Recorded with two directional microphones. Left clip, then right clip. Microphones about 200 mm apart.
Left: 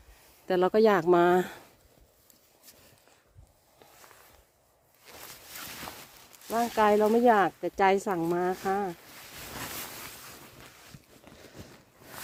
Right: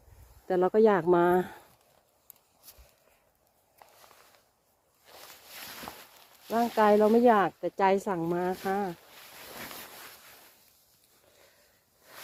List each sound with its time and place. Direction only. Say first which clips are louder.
0.4 s speech: even; 20° left (ahead or behind)
6.5 s speech: right 1 dB; 5° left (ahead or behind)
7.1 s speech: even; 15° left (ahead or behind)